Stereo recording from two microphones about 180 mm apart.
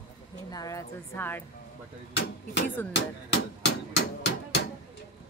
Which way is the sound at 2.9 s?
70° left (ahead or behind).